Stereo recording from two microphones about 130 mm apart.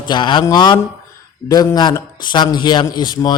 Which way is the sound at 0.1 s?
40° left (ahead or behind).